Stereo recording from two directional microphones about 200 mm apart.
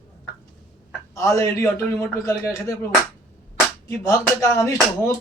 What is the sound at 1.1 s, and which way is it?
A man's voice, 15° left (ahead or behind).